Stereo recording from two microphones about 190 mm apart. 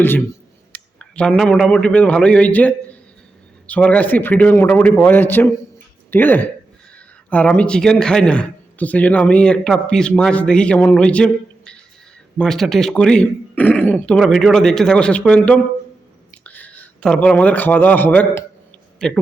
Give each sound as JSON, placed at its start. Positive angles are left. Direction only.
{"t": 0.7, "sound": "a man's voice", "side_deg": 5}